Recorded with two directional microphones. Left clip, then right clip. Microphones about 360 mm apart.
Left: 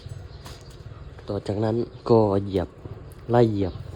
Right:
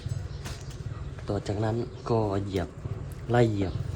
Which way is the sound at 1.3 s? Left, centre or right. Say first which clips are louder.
Left 4 dB; centre.